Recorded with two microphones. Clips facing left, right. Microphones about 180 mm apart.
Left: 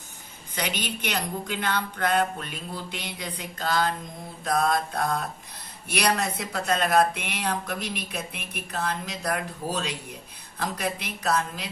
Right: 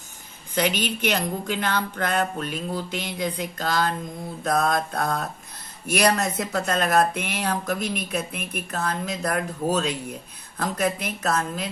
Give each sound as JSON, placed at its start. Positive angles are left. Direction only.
{"t": 0.5, "sound": "speech", "side_deg": -50}